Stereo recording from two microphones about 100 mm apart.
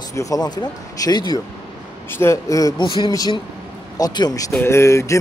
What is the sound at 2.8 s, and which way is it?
A man's voice, 45° left (ahead or behind).